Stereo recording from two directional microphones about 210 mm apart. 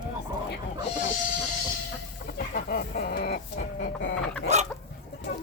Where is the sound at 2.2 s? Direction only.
45° left (ahead or behind).